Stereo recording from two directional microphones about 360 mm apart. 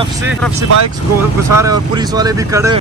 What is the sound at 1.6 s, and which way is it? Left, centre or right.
Speech, centre.